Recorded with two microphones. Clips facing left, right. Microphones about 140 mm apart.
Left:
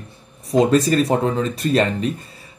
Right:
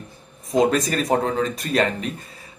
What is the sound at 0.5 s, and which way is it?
Speech, 30° left (ahead or behind).